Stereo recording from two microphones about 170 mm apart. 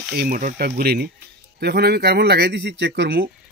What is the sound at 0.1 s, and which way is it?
Speech, 60° right (ahead or behind).